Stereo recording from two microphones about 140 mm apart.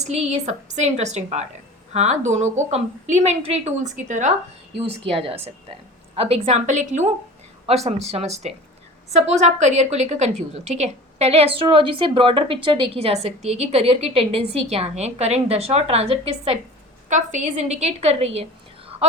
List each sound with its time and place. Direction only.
0.0 s a woman's voice: 50° right (ahead or behind)
4.9 s a woman's voice: 40° right (ahead or behind)
17.1 s a woman's voice: 60° right (ahead or behind)